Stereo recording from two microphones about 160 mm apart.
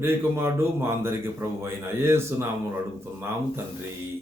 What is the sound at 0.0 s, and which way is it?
A man's voice, 15° right (ahead or behind).